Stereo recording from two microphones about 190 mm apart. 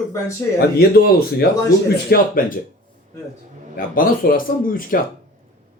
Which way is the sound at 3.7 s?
45° left (ahead or behind).